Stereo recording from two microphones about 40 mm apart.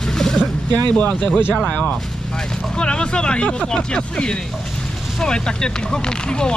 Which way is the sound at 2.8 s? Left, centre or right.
Left.